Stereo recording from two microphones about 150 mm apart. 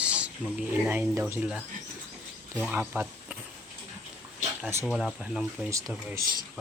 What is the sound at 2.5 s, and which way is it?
Speech, 10° right (ahead or behind).